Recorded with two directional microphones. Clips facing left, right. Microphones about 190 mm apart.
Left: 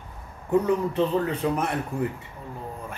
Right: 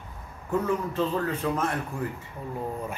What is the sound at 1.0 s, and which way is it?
Speech, 15° left (ahead or behind).